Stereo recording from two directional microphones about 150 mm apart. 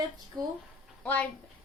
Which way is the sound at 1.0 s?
10° left (ahead or behind).